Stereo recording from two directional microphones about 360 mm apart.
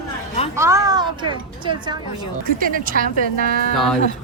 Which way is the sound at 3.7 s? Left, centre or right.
Centre.